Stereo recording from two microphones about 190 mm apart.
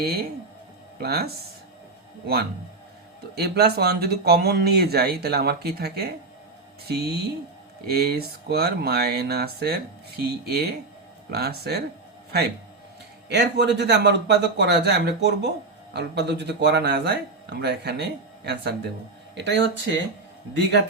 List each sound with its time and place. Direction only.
0.0 s speech: 55° right (ahead or behind)
13.2 s speech: 65° right (ahead or behind)